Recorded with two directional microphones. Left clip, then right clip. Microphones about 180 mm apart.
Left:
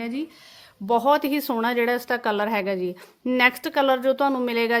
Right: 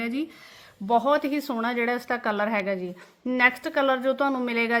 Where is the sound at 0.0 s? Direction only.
15° left (ahead or behind).